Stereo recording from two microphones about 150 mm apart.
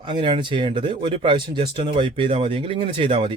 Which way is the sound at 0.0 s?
30° right (ahead or behind).